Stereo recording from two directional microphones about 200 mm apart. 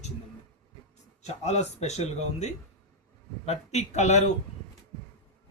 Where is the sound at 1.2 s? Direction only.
35° left (ahead or behind).